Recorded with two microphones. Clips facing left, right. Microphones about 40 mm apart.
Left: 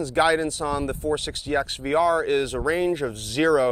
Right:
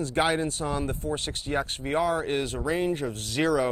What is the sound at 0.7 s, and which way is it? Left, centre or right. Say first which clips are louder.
Speech: left 3 dB; left.